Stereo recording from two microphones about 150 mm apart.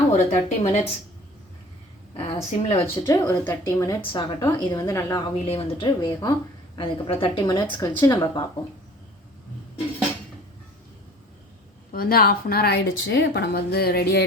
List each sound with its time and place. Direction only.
0.1 s speech: 50° left (ahead or behind)
2.1 s speech: 40° left (ahead or behind)
2.8 s speech: 20° left (ahead or behind)
4.1 s speech: 30° left (ahead or behind)
5.5 s speech: 40° left (ahead or behind); by 8.4 s 20° left (ahead or behind)
11.9 s a woman's voice: 80° left